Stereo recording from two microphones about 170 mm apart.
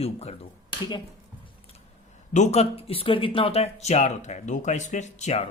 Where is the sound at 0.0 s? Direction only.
35° left (ahead or behind).